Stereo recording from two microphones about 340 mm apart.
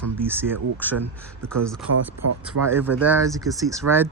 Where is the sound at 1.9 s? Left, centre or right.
Right.